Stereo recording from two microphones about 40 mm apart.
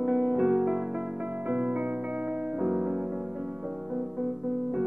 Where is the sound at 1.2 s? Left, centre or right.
Right.